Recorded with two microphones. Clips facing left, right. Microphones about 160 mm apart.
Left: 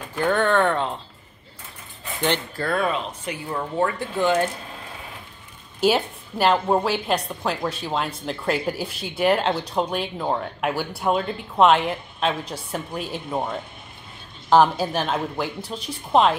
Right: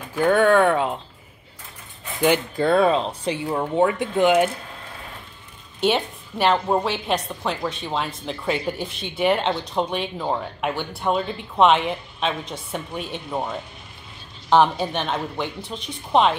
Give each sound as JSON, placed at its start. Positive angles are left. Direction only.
{"t": 0.1, "sound": "speech", "side_deg": -5}
{"t": 2.2, "sound": "speech", "side_deg": -10}
{"t": 2.6, "sound": "speech", "side_deg": -30}
{"t": 3.4, "sound": "speech", "side_deg": -15}
{"t": 5.8, "sound": "a woman's voice", "side_deg": 5}